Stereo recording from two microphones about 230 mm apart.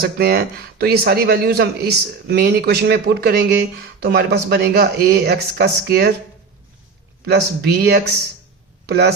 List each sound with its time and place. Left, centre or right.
0.0 s speech: right
7.3 s speech: right